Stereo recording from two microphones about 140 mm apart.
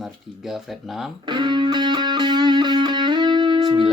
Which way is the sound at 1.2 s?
35° right (ahead or behind).